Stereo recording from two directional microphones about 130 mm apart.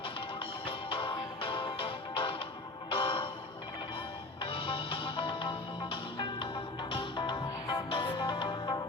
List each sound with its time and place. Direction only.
0.0 s music: 45° left (ahead or behind)